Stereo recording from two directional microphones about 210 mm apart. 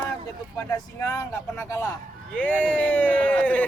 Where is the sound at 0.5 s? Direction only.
15° left (ahead or behind).